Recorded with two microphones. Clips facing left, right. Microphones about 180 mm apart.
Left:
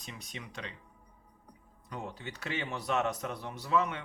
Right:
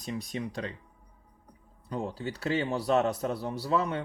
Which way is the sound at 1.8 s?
35° right (ahead or behind).